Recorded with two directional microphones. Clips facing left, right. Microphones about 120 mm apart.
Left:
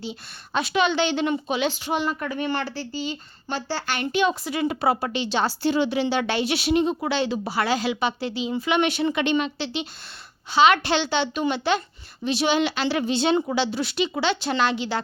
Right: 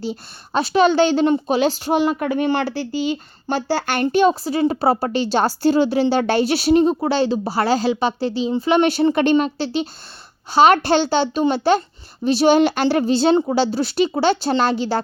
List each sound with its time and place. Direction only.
0.0 s a woman's voice: 35° right (ahead or behind)
2.6 s speech: 65° right (ahead or behind)
3.5 s a woman's voice: 45° right (ahead or behind)